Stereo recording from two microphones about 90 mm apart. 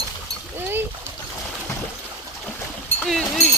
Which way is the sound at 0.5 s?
25° right (ahead or behind).